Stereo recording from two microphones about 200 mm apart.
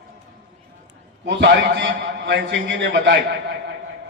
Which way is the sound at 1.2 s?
65° right (ahead or behind).